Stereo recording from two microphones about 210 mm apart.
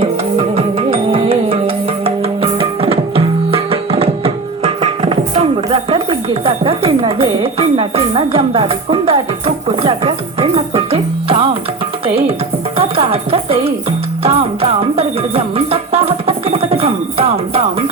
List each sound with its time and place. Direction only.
0.0 s music: 25° right (ahead or behind)
12.7 s music: 25° right (ahead or behind)